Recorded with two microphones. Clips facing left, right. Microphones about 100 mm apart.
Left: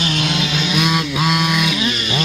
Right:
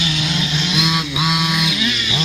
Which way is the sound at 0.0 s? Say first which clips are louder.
Left 2 dB; 50° left (ahead or behind).